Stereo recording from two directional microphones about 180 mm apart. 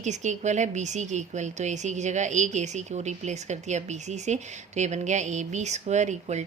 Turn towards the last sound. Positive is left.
turn(degrees=-40)  # may be behind; listen again after turning